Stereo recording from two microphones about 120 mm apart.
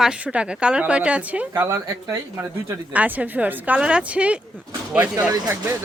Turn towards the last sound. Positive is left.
turn(degrees=-25)  # may be behind; listen again after turning